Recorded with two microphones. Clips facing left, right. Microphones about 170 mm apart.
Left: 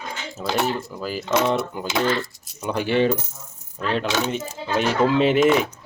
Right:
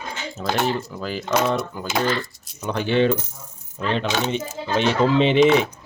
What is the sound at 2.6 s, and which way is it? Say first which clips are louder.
Speech: right 1 dB; 10° left (ahead or behind).